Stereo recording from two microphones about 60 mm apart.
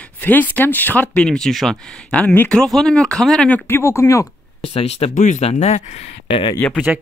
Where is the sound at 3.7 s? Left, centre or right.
Left.